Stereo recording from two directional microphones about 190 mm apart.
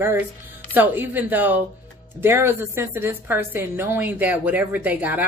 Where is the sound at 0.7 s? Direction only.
10° right (ahead or behind).